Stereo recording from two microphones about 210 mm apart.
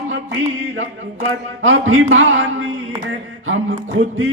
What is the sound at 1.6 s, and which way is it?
A man's voice, 65° right (ahead or behind).